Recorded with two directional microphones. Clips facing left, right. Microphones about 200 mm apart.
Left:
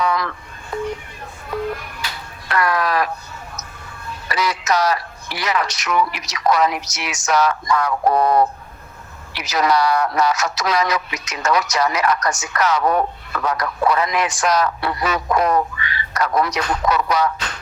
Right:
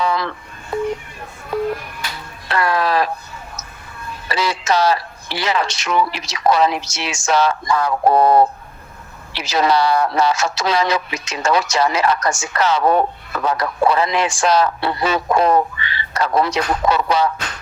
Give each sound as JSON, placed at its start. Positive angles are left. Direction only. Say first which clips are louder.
{"t": 0.0, "sound": "telephone", "louder": "right 1 dB", "side_deg": -30}
{"t": 0.7, "sound": "a sound", "louder": "right 4 dB", "side_deg": -25}
{"t": 2.5, "sound": "speech", "louder": "right 1 dB", "side_deg": -30}
{"t": 4.3, "sound": "speech", "louder": "right 1 dB", "side_deg": -30}